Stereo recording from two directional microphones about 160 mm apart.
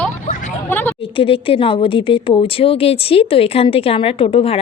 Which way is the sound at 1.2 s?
35° left (ahead or behind).